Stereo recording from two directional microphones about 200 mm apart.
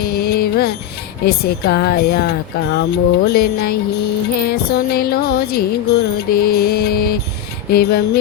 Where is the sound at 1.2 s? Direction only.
55° left (ahead or behind).